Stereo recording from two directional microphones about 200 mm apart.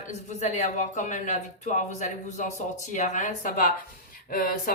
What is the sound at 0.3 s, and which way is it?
A woman's voice, 35° left (ahead or behind).